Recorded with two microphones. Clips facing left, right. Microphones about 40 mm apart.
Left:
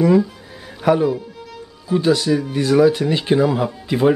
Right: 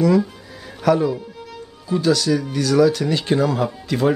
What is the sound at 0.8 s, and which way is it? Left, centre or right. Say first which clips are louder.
A man's voice: left 1 dB; centre.